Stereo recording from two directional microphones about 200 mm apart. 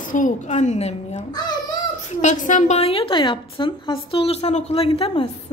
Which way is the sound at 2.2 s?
40° left (ahead or behind).